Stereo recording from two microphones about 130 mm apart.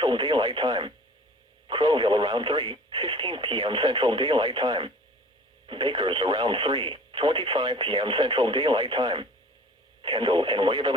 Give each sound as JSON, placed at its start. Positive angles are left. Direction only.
{"t": 0.0, "sound": "speech", "side_deg": -35}